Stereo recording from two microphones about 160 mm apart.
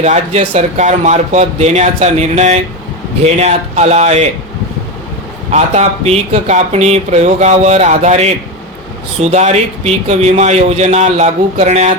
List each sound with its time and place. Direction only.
0.0 s speech: 40° right (ahead or behind)
5.5 s speech: 45° right (ahead or behind)